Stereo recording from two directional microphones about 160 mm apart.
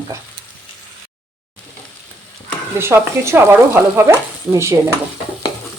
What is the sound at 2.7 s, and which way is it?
Speech, 15° right (ahead or behind).